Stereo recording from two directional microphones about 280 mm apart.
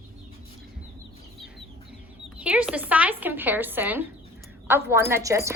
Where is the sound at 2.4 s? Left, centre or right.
Centre.